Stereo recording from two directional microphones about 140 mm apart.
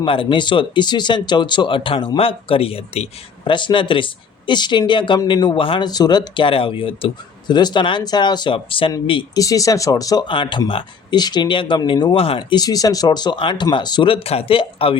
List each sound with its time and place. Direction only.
0.0 s speech: 40° left (ahead or behind)
9.4 s speech: 25° left (ahead or behind)
10.2 s speech: 35° left (ahead or behind)